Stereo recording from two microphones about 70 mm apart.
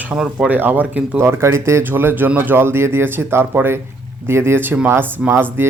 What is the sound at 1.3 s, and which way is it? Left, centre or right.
Speech, right.